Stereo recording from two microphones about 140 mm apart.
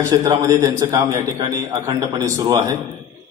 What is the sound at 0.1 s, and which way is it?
A man's voice, 20° right (ahead or behind).